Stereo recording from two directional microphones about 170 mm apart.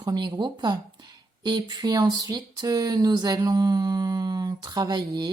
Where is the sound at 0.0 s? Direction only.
25° right (ahead or behind).